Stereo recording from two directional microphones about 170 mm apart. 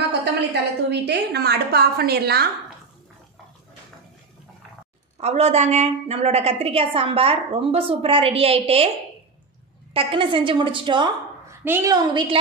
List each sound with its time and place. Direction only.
0.2 s a woman's voice: 80° right
5.2 s a woman's voice: 40° right (ahead or behind)
9.9 s a woman's voice: 30° right (ahead or behind)
11.4 s a sound: 15° right (ahead or behind)
11.9 s a woman's voice: 25° right (ahead or behind)